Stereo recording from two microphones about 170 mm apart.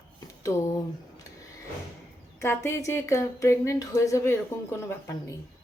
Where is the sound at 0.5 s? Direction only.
20° left (ahead or behind).